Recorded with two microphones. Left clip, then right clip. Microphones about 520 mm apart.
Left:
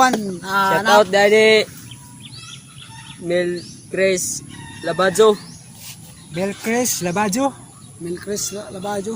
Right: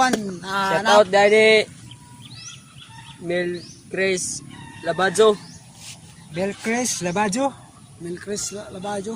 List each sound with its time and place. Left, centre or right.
0.4 s speech: right
3.2 s speech: right